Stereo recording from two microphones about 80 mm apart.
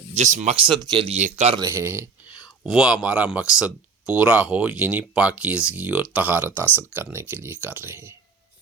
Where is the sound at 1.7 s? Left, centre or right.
Right.